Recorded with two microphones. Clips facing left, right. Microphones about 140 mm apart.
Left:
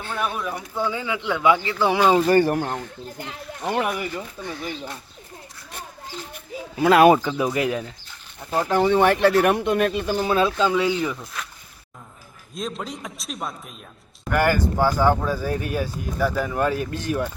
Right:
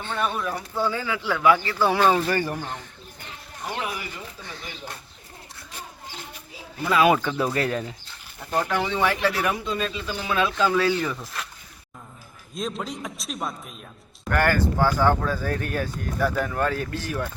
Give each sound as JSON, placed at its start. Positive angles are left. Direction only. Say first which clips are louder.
{"t": 0.0, "sound": "speech", "louder": "even", "side_deg": 5}
{"t": 0.9, "sound": "speech", "louder": "left 2 dB", "side_deg": 15}
{"t": 2.4, "sound": "speech", "louder": "left 8 dB", "side_deg": 60}
{"t": 6.8, "sound": "speech", "louder": "left 6 dB", "side_deg": 70}
{"t": 7.2, "sound": "speech", "louder": "left 2 dB", "side_deg": 15}
{"t": 8.7, "sound": "speech", "louder": "left 9 dB", "side_deg": 45}
{"t": 10.2, "sound": "speech", "louder": "left 1 dB", "side_deg": 30}
{"t": 10.7, "sound": "speech", "louder": "left 1 dB", "side_deg": 15}
{"t": 11.2, "sound": "speech", "louder": "even", "side_deg": 0}
{"t": 12.5, "sound": "speech", "louder": "even", "side_deg": 0}
{"t": 14.3, "sound": "speech", "louder": "left 2 dB", "side_deg": 10}
{"t": 16.5, "sound": "speech", "louder": "left 2 dB", "side_deg": 15}